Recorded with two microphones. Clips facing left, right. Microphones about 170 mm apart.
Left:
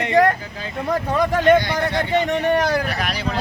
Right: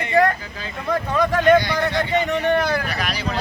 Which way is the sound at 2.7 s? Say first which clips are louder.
Left 2 dB; 45° left (ahead or behind).